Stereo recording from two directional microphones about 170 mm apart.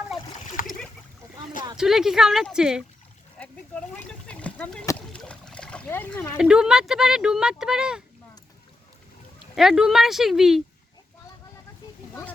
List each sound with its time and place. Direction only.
1.7 s speech: 5° right (ahead or behind)
3.3 s speech: 5° left (ahead or behind)
4.3 s a sound: 5° left (ahead or behind)
6.3 s speech: 5° right (ahead or behind)
9.6 s speech: 5° right (ahead or behind)